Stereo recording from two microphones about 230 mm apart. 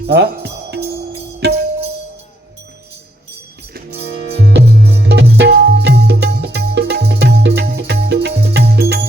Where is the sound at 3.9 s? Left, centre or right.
Right.